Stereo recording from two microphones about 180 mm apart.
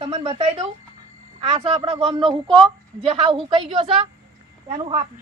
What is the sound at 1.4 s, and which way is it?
A woman's voice, 35° right (ahead or behind).